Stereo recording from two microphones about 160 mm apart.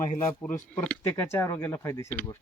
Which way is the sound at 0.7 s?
10° left (ahead or behind).